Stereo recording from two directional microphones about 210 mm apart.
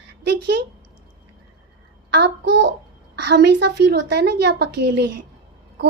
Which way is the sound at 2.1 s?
55° right (ahead or behind).